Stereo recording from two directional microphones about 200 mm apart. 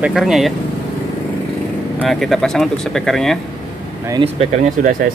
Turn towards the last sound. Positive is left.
turn(degrees=-40)  # may be behind; listen again after turning